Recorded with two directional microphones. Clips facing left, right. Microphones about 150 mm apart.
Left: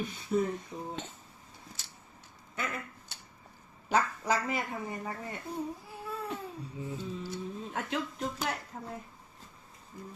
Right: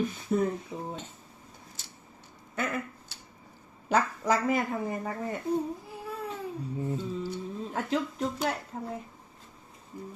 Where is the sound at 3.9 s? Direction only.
45° right (ahead or behind).